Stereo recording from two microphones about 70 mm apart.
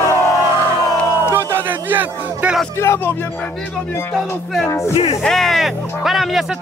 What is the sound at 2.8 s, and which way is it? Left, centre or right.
Speech, left.